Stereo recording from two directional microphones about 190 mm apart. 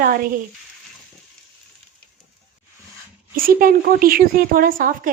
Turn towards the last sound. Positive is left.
turn(degrees=-45)  # may be behind; listen again after turning